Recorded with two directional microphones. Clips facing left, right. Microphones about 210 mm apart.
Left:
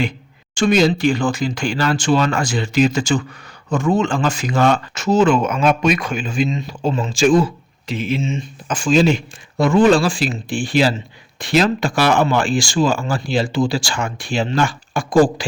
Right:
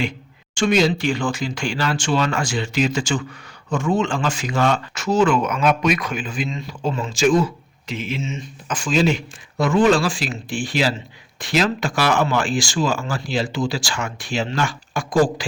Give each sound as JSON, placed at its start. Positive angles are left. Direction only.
{"t": 0.5, "sound": "speech", "side_deg": 40}
{"t": 4.9, "sound": "speech", "side_deg": 25}